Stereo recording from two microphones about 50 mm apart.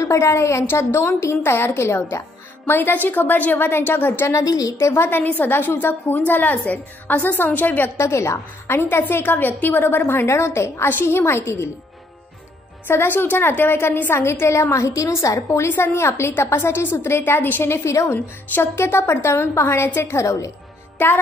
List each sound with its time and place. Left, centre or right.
0.0 s a woman's voice: left
1.6 s a woman's voice: left
1.9 s a woman's voice: left
4.3 s a woman's voice: left
8.8 s a woman's voice: left
12.8 s a woman's voice: left
14.1 s a woman's voice: left
15.6 s a woman's voice: left
17.3 s a woman's voice: left
17.8 s a woman's voice: left
20.0 s a woman's voice: left
21.0 s music: left